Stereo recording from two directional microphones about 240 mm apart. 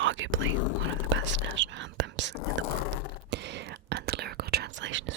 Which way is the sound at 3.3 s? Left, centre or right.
Right.